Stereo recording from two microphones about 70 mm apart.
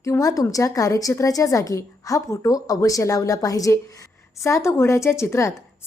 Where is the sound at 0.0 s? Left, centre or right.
Left.